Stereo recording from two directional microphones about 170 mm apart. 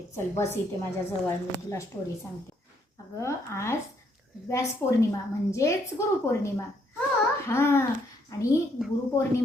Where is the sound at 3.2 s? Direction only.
15° left (ahead or behind).